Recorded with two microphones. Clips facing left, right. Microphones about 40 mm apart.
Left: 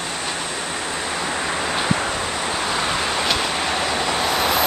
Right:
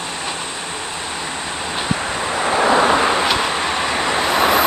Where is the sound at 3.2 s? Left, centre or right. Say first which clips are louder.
Right 3 dB; centre.